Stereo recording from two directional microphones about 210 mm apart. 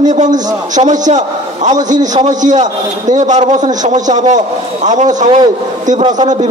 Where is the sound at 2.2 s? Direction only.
35° right (ahead or behind).